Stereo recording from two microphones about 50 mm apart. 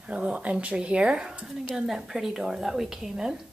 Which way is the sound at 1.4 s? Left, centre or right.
Centre.